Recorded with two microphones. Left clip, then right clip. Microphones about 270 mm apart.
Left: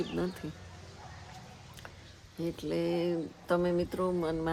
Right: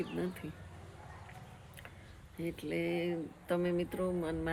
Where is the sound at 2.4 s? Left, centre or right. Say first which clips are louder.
Left 4 dB; centre.